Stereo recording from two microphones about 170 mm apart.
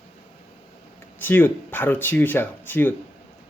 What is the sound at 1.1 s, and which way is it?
Speech, 10° left (ahead or behind).